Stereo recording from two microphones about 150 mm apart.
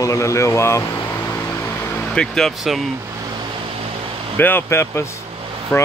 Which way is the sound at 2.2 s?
5° left (ahead or behind).